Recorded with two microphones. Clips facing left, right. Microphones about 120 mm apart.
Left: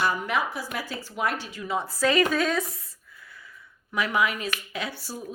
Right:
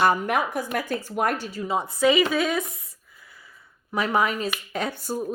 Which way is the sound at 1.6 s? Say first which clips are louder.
Right 2 dB; 25° right (ahead or behind).